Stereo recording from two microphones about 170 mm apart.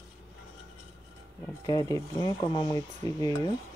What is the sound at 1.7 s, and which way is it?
Speech, 20° left (ahead or behind).